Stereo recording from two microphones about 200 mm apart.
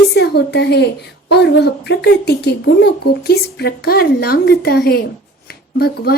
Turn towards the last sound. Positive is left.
turn(degrees=50)  # may be behind; listen again after turning